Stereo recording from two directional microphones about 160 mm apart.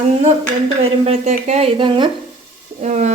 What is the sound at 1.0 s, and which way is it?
Speech, 40° right (ahead or behind).